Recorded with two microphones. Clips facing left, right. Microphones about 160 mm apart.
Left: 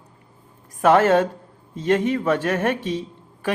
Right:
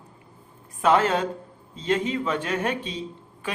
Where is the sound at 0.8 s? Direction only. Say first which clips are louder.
Left 5 dB; 50° left (ahead or behind).